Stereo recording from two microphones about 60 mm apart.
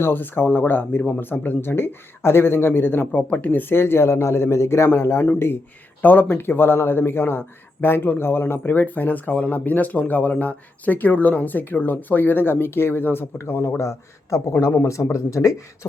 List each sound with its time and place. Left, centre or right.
0.0 s a man's voice: left
6.0 s a man's voice: left
13.7 s speech: left